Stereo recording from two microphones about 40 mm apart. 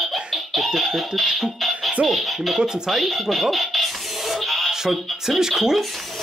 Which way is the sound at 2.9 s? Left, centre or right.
Centre.